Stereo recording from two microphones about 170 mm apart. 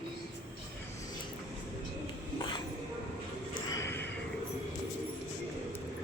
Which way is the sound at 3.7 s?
15° left (ahead or behind).